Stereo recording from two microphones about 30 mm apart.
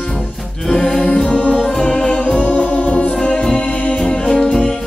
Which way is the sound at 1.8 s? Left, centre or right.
Left.